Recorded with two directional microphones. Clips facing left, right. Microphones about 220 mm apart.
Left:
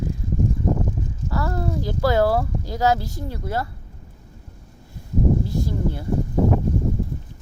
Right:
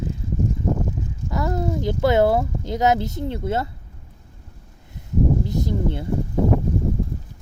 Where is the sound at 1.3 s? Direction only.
20° right (ahead or behind).